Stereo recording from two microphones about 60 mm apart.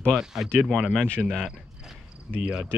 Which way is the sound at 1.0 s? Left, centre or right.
Centre.